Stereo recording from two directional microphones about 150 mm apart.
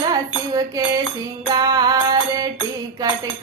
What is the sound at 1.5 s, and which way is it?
Mantra, 25° right (ahead or behind).